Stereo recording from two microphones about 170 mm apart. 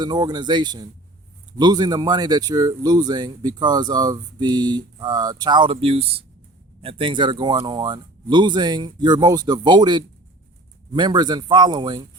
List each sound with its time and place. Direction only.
0.0 s speech: 25° right (ahead or behind)